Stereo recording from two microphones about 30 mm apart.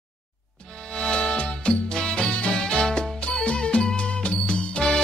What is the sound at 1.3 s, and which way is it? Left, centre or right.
Music, left.